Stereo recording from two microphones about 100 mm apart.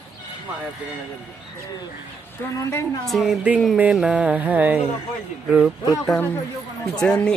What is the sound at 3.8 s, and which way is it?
Music, 10° right (ahead or behind).